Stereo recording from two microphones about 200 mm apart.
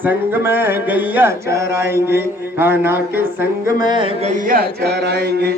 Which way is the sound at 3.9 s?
25° right (ahead or behind).